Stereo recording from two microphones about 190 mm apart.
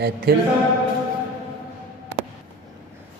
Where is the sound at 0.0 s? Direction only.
60° right (ahead or behind).